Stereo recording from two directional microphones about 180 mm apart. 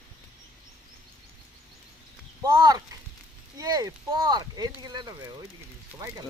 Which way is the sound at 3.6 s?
20° right (ahead or behind).